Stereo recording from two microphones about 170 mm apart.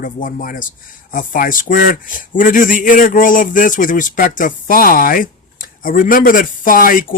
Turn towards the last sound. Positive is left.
turn(degrees=55)  # may be behind; listen again after turning